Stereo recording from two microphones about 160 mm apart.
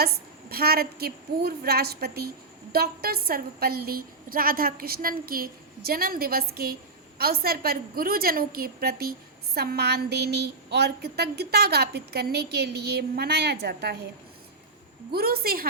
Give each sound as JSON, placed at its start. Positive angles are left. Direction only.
{"t": 0.0, "sound": "a woman's voice", "side_deg": -75}
{"t": 9.6, "sound": "a woman's voice", "side_deg": -85}
{"t": 15.1, "sound": "a woman's voice", "side_deg": -75}